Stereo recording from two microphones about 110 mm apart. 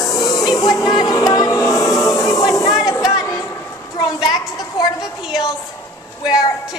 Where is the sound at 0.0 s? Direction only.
35° left (ahead or behind).